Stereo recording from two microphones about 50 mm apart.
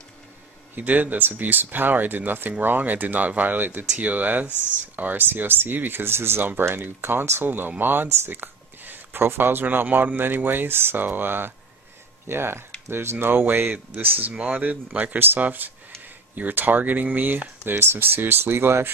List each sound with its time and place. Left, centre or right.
0.7 s speech: right
17.6 s speech: right